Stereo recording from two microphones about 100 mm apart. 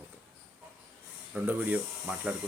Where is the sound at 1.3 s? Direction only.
15° right (ahead or behind).